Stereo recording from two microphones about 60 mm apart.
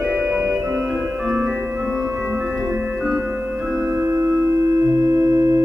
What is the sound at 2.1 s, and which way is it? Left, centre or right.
Music, right.